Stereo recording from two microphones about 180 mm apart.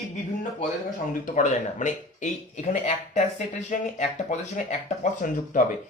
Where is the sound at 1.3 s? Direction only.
45° left (ahead or behind).